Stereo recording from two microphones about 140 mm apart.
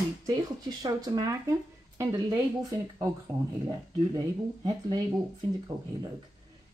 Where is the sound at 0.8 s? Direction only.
25° right (ahead or behind).